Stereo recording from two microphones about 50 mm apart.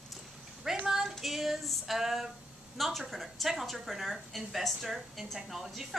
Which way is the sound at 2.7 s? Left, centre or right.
Centre.